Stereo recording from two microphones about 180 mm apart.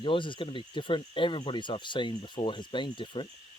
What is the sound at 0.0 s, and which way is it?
Speech, 25° left (ahead or behind).